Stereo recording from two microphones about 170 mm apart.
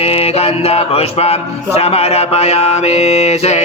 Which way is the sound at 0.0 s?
35° left (ahead or behind).